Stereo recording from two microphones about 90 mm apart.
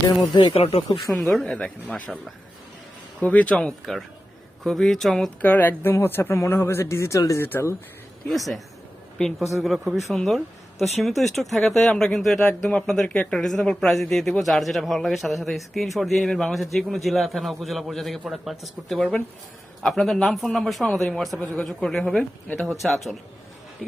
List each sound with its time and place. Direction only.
0.3 s speech: 80° left
1.4 s speech: 5° left (ahead or behind)
3.2 s a man's voice: 15° left (ahead or behind)
5.4 s speech: 20° left (ahead or behind)
8.3 s a man's voice: centre (ahead or behind)
9.6 s a man's voice: centre (ahead or behind)
21.4 s speech: 15° left (ahead or behind)
21.7 s a man's voice: 5° left (ahead or behind)